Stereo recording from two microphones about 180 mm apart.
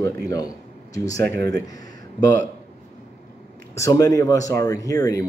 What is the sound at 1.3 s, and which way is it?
Speech, 70° right (ahead or behind).